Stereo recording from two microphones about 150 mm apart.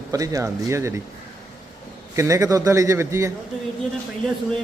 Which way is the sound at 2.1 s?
20° right (ahead or behind).